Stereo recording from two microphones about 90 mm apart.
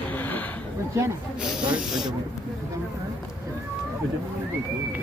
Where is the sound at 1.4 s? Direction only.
10° right (ahead or behind).